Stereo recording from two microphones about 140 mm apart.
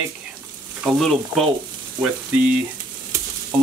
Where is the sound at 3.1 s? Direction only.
20° right (ahead or behind).